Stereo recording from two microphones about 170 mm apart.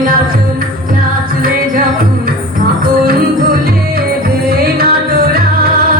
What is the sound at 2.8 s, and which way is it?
Music, 60° right (ahead or behind).